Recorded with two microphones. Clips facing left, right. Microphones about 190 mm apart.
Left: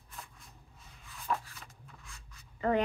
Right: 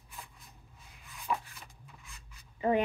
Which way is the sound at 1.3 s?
5° right (ahead or behind).